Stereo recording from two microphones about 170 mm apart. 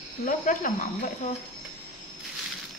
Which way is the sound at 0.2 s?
50° left (ahead or behind).